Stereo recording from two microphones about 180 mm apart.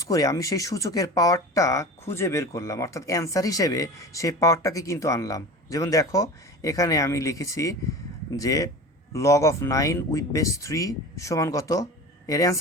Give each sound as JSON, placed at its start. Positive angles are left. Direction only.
{"t": 0.0, "sound": "speech", "side_deg": 20}